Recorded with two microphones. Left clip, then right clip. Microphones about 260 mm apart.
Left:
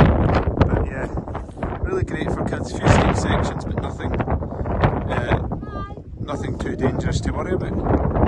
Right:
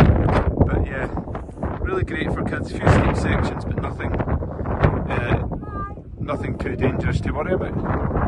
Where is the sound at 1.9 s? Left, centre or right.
Centre.